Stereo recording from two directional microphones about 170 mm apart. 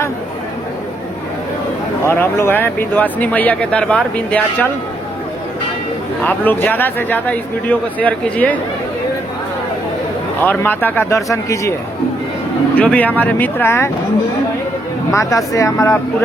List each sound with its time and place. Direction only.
2.0 s speech: 15° left (ahead or behind)
6.2 s speech: 10° left (ahead or behind)
10.4 s speech: 10° left (ahead or behind)
12.7 s speech: 10° left (ahead or behind)
15.1 s speech: 20° left (ahead or behind)